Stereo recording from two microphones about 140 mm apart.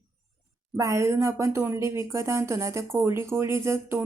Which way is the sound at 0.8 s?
20° right (ahead or behind).